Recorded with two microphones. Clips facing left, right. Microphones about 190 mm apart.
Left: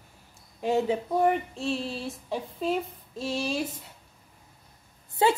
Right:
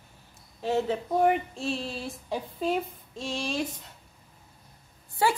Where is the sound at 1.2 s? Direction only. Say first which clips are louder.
Right 3 dB; centre (ahead or behind).